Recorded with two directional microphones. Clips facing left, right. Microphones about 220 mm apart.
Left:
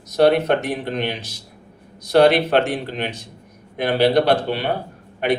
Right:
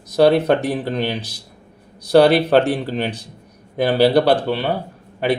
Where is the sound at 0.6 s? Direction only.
35° right (ahead or behind).